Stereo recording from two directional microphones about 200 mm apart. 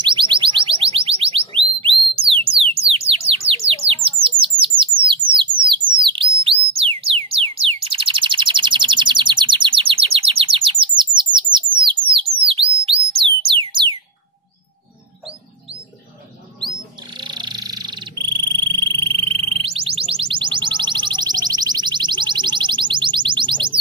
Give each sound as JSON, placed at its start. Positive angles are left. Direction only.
{"t": 0.0, "sound": "a sound", "side_deg": -25}
{"t": 2.9, "sound": "bird", "side_deg": -30}
{"t": 6.0, "sound": "music", "side_deg": -25}
{"t": 11.5, "sound": "bird", "side_deg": -25}
{"t": 12.8, "sound": "music", "side_deg": -25}
{"t": 16.5, "sound": "frog", "side_deg": -25}